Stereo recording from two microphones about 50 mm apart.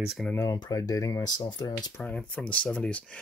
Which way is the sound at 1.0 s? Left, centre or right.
Left.